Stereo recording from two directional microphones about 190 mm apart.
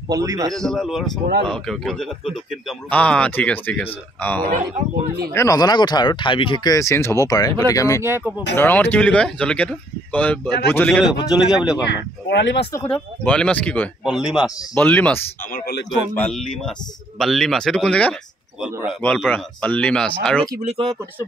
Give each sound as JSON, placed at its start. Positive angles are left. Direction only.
{"t": 0.1, "sound": "a man's voice", "side_deg": -20}
{"t": 0.5, "sound": "speech", "side_deg": 0}
{"t": 11.9, "sound": "speech", "side_deg": 65}
{"t": 12.7, "sound": "speech", "side_deg": 10}
{"t": 14.8, "sound": "speech", "side_deg": 10}
{"t": 15.5, "sound": "speech", "side_deg": 55}
{"t": 16.2, "sound": "speech", "side_deg": 5}
{"t": 18.6, "sound": "speech", "side_deg": -5}
{"t": 20.6, "sound": "speech", "side_deg": -30}